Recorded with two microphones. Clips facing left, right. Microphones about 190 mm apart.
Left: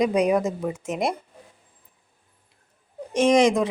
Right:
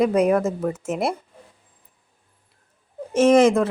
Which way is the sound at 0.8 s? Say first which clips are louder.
Right 1 dB; 5° right (ahead or behind).